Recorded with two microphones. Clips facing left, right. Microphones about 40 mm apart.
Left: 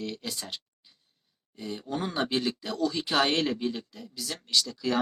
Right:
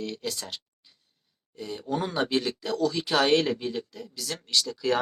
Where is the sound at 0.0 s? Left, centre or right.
Centre.